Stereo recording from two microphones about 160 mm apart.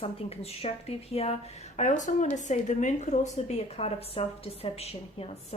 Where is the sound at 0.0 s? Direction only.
40° left (ahead or behind).